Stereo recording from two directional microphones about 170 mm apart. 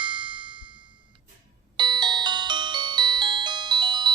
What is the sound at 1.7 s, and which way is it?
Music, 25° right (ahead or behind).